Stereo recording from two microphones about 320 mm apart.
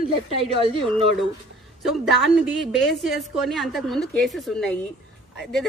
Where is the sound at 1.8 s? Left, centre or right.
Centre.